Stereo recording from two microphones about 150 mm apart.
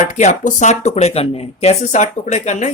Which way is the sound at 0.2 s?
50° left (ahead or behind).